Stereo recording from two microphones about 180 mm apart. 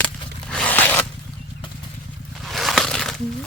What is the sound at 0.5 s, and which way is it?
Zipper, 10° left (ahead or behind).